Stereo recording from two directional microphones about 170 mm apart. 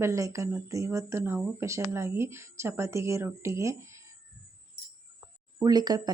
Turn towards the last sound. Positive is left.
turn(degrees=-25)  # may be behind; listen again after turning